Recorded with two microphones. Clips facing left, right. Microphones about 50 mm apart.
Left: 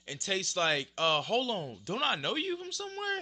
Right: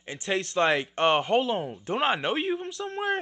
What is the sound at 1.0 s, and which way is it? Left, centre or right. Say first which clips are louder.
A man's voice: right 7 dB; centre.